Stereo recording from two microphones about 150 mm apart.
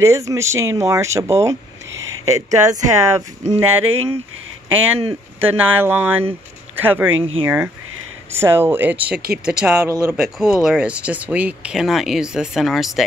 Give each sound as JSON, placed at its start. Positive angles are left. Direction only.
{"t": 0.0, "sound": "speech", "side_deg": -20}
{"t": 5.4, "sound": "speech", "side_deg": -15}
{"t": 9.8, "sound": "speech", "side_deg": -20}
{"t": 10.1, "sound": "speech", "side_deg": -5}